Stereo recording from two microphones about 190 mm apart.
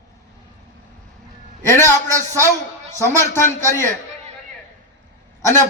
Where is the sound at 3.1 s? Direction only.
15° left (ahead or behind).